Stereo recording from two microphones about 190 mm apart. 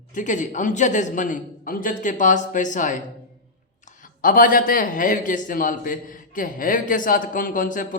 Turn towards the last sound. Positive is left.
turn(degrees=45)  # may be behind; listen again after turning